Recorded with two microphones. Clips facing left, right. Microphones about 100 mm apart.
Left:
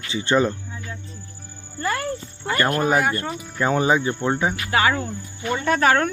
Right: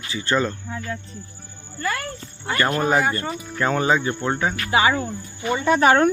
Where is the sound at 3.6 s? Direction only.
15° left (ahead or behind).